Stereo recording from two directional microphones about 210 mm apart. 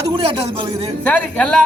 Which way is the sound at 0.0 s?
25° right (ahead or behind).